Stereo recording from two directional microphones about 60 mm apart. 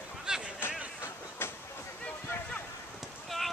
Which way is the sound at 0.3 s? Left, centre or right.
Centre.